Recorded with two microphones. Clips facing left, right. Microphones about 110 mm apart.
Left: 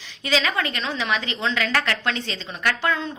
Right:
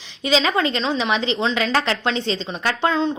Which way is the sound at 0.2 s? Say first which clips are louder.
Right 5 dB; 20° right (ahead or behind).